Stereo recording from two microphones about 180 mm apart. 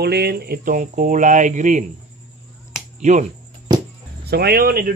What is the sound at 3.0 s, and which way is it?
Speech, 40° right (ahead or behind).